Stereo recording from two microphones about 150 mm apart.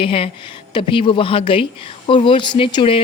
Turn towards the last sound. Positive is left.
turn(degrees=35)  # may be behind; listen again after turning